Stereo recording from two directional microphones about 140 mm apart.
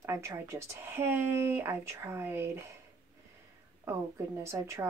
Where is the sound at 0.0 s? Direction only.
20° right (ahead or behind).